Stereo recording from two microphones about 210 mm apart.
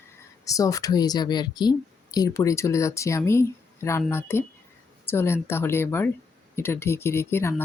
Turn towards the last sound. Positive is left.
turn(degrees=10)  # may be behind; listen again after turning